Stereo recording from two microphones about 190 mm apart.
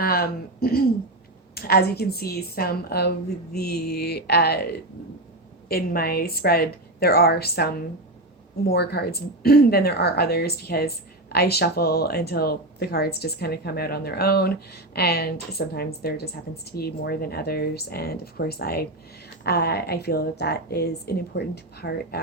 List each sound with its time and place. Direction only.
0.0 s a woman's voice: 55° left (ahead or behind)